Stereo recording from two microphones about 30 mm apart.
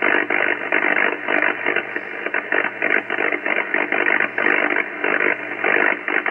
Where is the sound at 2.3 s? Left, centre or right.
Centre.